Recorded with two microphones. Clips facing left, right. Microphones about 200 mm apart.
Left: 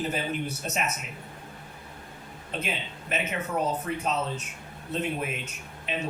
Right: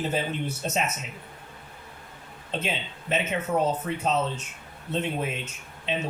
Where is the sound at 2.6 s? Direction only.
25° right (ahead or behind).